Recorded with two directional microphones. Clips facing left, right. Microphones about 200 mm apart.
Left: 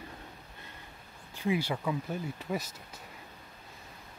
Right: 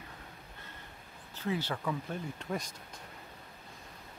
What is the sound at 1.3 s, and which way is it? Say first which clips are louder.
Speech: left 4 dB; 10° left (ahead or behind).